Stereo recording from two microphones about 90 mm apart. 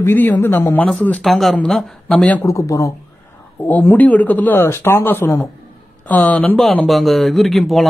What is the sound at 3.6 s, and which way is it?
Speech, 20° left (ahead or behind).